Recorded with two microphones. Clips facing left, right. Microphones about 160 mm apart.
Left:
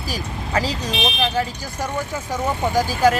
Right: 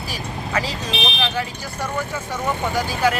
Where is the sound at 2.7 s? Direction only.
40° left (ahead or behind).